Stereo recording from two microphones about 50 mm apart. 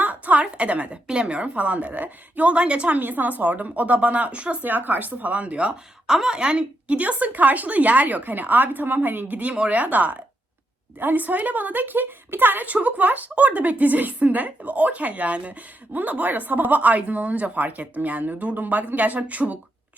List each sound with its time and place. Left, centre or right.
0.0 s a sound: right
0.4 s a woman's voice: right
3.0 s a woman's voice: right
6.1 s a woman's voice: centre; by 19.5 s right